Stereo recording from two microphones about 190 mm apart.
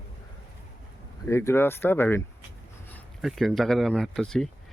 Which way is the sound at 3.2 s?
Centre (ahead or behind).